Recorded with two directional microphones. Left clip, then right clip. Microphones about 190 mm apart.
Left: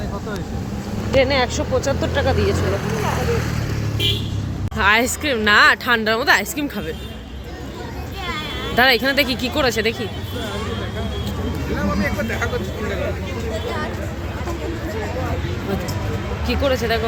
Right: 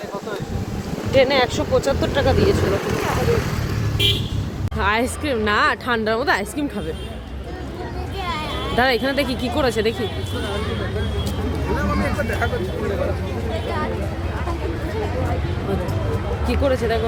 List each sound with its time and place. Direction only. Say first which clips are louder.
1.1 s speech: right 1 dB; 20° right (ahead or behind)
4.8 s a woman's voice: left 4 dB; 5° right (ahead or behind)
8.7 s speech: left 4 dB; 5° right (ahead or behind)
9.6 s speech: even; 20° right (ahead or behind)
16.5 s a woman's voice: left 1 dB; 10° right (ahead or behind)